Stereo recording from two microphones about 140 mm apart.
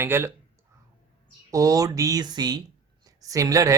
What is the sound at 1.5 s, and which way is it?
Speech, 25° right (ahead or behind).